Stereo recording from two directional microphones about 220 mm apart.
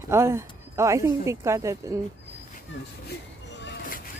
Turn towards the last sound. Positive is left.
turn(degrees=55)  # may be behind; listen again after turning